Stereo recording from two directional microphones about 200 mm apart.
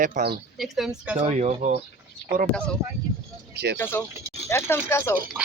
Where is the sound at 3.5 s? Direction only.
55° right (ahead or behind).